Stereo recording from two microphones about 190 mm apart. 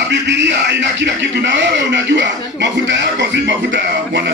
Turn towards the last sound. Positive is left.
turn(degrees=-70)  # may be behind; listen again after turning